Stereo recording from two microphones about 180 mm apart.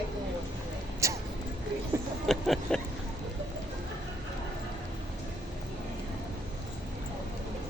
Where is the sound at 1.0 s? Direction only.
15° right (ahead or behind).